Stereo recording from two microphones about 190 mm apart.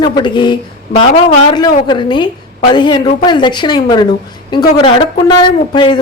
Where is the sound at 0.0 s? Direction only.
25° left (ahead or behind).